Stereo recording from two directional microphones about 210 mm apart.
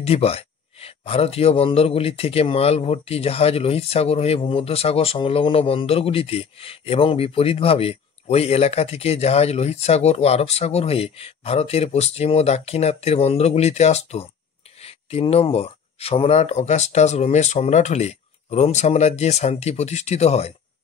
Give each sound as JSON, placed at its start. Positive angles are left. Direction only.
{"t": 0.0, "sound": "speech", "side_deg": 30}